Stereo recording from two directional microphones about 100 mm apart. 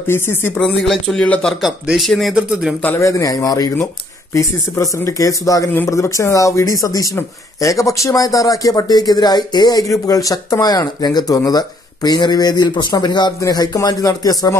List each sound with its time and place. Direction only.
0.0 s speech: 25° left (ahead or behind)
0.6 s speech: 5° left (ahead or behind)
1.6 s speech: centre (ahead or behind)
2.3 s speech: 10° right (ahead or behind)
3.0 s speech: 30° left (ahead or behind)